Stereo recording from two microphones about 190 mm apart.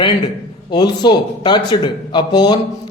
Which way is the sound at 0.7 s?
25° left (ahead or behind).